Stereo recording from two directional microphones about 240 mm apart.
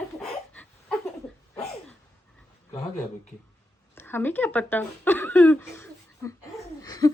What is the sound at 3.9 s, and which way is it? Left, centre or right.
A woman's voice, centre.